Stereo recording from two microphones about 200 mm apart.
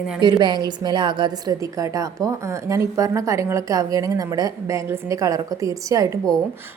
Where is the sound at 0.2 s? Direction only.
20° right (ahead or behind).